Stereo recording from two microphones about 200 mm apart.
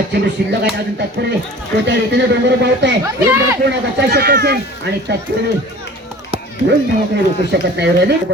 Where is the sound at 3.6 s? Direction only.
60° right (ahead or behind).